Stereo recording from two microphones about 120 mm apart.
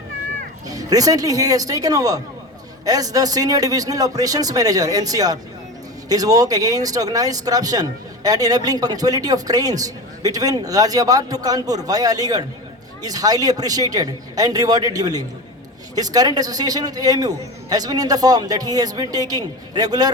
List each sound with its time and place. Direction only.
0.7 s speech: 30° right (ahead or behind)